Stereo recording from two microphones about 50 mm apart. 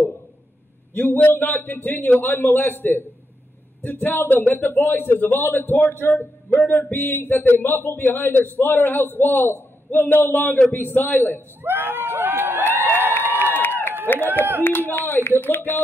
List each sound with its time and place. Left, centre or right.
0.9 s a man's voice: left
11.6 s a sound: right
13.2 s crowd: right
14.0 s a man's voice: left